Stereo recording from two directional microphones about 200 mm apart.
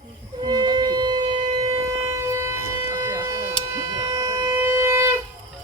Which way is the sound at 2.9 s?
15° right (ahead or behind).